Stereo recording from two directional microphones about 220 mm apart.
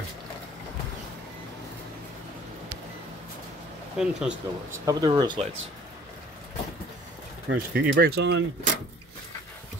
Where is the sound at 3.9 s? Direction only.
5° right (ahead or behind).